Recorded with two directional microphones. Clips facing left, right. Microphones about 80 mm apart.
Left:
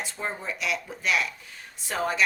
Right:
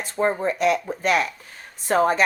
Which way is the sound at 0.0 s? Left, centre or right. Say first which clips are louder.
Right 11 dB; right.